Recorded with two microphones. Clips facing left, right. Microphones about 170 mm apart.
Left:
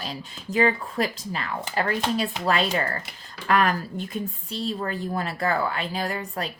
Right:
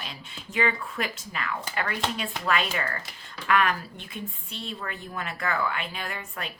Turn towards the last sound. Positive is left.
turn(degrees=35)  # may be behind; listen again after turning